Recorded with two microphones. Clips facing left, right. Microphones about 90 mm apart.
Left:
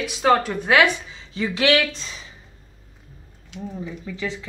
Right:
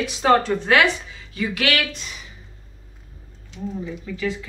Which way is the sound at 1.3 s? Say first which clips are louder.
Left 3 dB; 25° left (ahead or behind).